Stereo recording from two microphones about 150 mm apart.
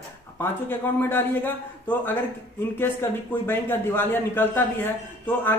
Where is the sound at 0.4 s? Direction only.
15° left (ahead or behind).